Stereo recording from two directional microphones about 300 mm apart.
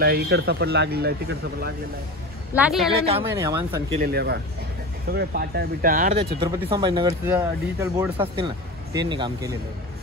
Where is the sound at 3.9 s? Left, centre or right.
Right; by 9.5 s centre.